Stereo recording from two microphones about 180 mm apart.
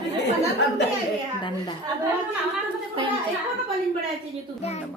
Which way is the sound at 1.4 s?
25° left (ahead or behind).